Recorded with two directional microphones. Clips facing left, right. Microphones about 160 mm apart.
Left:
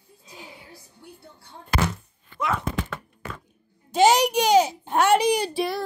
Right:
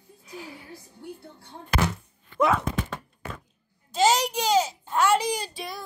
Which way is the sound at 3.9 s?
65° left (ahead or behind).